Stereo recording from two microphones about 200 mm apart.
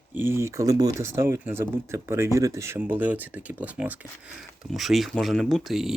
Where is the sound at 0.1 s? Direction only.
10° right (ahead or behind).